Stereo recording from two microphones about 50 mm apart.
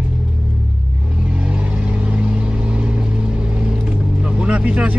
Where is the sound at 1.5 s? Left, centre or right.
Right.